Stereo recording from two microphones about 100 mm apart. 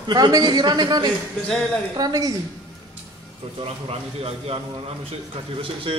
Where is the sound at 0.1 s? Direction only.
45° right (ahead or behind).